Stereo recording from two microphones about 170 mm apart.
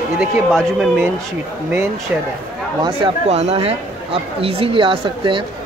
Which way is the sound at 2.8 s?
35° right (ahead or behind).